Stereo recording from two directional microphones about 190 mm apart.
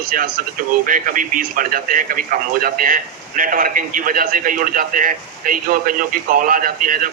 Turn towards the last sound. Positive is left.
turn(degrees=-45)  # may be behind; listen again after turning